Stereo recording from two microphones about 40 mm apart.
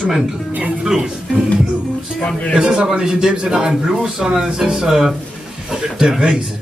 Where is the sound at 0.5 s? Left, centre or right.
Right.